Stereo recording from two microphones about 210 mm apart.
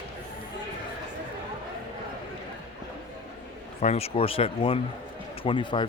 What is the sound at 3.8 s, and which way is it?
Speech, 30° left (ahead or behind).